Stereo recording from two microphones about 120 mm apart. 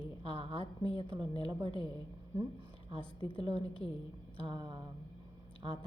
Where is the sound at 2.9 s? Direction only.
45° right (ahead or behind).